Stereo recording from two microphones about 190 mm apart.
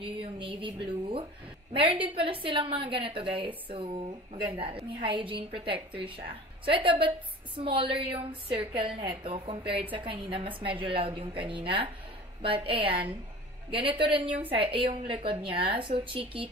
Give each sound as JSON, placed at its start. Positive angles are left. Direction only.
{"t": 0.0, "sound": "a woman's voice", "side_deg": -30}